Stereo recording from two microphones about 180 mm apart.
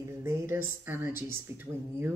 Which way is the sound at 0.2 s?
15° right (ahead or behind).